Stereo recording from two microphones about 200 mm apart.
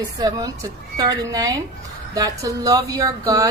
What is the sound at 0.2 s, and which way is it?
Speech, 15° right (ahead or behind).